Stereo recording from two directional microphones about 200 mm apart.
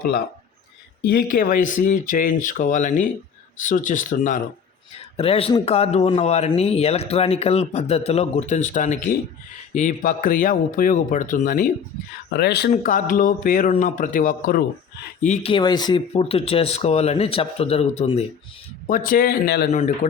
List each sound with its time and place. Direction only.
1.0 s speech: 50° left (ahead or behind)
5.1 s speech: 30° left (ahead or behind)
12.3 s speech: 55° left (ahead or behind)
12.7 s speech: 40° left (ahead or behind)
15.5 s speech: 20° left (ahead or behind)
18.9 s speech: 45° left (ahead or behind)